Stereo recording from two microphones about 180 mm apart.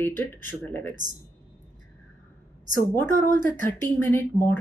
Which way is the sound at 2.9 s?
10° left (ahead or behind).